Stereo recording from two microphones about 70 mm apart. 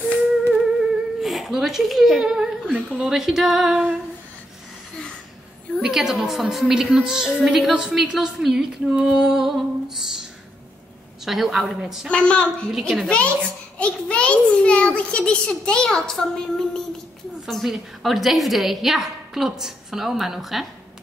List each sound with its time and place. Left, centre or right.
0.5 s speech: centre
5.8 s a woman's voice: centre
11.2 s a woman's voice: centre
12.1 s a child's voice: centre
12.7 s a woman's voice: centre
13.1 s a child's voice: centre